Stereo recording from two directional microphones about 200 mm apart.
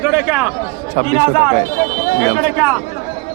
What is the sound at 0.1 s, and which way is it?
Speech, 5° right (ahead or behind).